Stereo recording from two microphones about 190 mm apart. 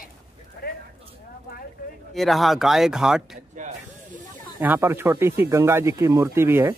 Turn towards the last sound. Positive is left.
turn(degrees=-15)  # may be behind; listen again after turning